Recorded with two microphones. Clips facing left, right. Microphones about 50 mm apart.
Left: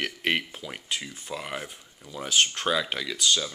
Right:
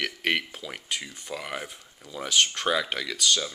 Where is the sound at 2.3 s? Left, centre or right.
Left.